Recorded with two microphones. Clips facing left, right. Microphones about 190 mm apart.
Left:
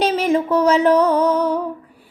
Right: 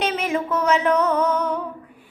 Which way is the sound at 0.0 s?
35° left (ahead or behind).